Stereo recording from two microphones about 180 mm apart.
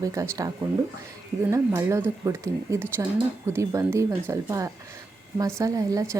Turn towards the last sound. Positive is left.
turn(degrees=-15)  # may be behind; listen again after turning